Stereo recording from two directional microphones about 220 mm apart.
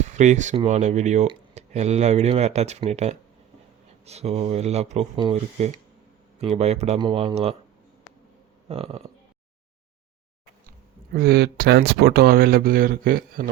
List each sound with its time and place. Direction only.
0.0 s speech: 30° right (ahead or behind)
8.6 s speech: 25° right (ahead or behind)
11.1 s speech: 45° right (ahead or behind)